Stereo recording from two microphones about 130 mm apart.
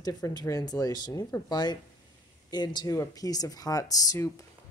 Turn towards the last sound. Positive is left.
turn(degrees=25)  # may be behind; listen again after turning